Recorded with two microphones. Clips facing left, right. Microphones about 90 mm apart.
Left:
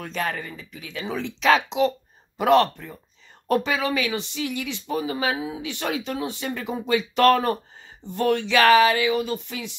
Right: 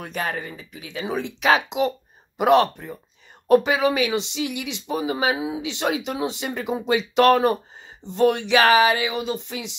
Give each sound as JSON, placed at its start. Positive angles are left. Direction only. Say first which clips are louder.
{"t": 0.0, "sound": "speech", "louder": "even", "side_deg": -15}